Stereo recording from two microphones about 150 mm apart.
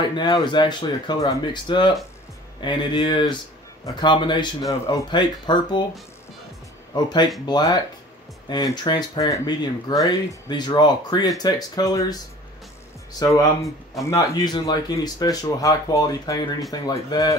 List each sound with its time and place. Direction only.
0.1 s speech: 30° left (ahead or behind)
6.9 s speech: 30° left (ahead or behind)
13.2 s speech: 20° left (ahead or behind)